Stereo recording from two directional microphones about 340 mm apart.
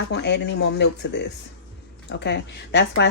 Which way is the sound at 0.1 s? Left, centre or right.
Left.